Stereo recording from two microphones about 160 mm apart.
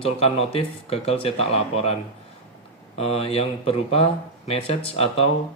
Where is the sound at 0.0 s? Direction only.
40° left (ahead or behind).